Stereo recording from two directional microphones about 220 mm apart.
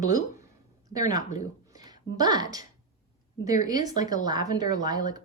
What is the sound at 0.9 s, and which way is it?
Speech, 15° right (ahead or behind).